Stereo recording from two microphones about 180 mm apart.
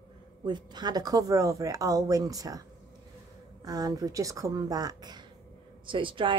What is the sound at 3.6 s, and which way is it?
Speech, 20° right (ahead or behind).